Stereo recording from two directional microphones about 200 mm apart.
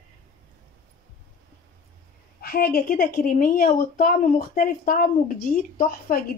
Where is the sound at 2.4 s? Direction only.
50° left (ahead or behind).